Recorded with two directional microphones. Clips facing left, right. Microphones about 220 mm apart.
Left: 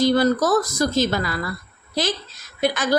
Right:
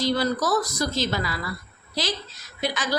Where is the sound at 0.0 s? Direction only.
50° left (ahead or behind).